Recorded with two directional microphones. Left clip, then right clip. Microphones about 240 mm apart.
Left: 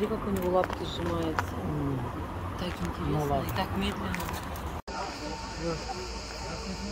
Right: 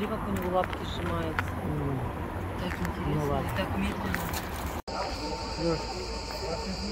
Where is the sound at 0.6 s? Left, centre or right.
Left.